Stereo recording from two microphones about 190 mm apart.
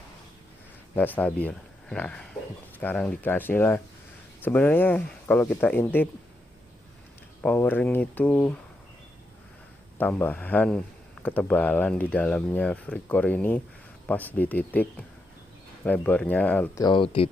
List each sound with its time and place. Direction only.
0.9 s speech: 10° left (ahead or behind)
7.4 s speech: 10° left (ahead or behind)
9.9 s speech: 10° left (ahead or behind)
16.8 s speech: 25° left (ahead or behind)